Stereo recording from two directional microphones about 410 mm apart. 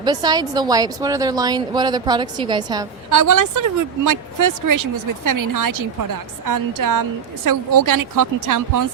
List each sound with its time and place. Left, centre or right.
0.0 s speech: centre
3.1 s speech: right